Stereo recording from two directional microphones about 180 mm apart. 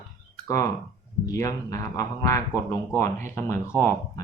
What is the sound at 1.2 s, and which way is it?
Speech, 20° left (ahead or behind).